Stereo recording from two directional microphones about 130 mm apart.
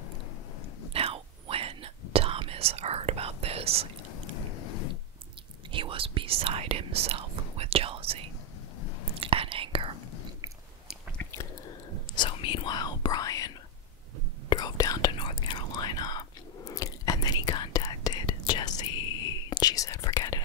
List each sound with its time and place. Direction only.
0.9 s whispering: 45° right (ahead or behind)
5.7 s whispering: 45° right (ahead or behind)
9.2 s whispering: 45° right (ahead or behind)
11.2 s chewing: 20° left (ahead or behind)
12.2 s whispering: 40° left (ahead or behind)
14.5 s whispering: 30° left (ahead or behind)